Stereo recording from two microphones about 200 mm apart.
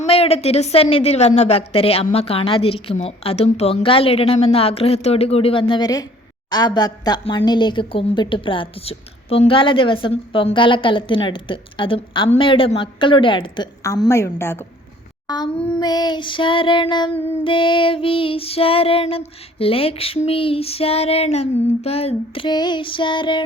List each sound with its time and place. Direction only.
0.0 s a woman's voice: 30° left (ahead or behind); by 14.6 s 10° left (ahead or behind)
15.5 s child singing: 5° left (ahead or behind)
15.8 s a woman's voice: 20° left (ahead or behind)